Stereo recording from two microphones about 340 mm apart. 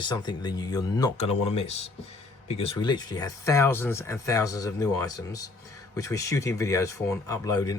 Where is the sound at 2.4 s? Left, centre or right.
Centre.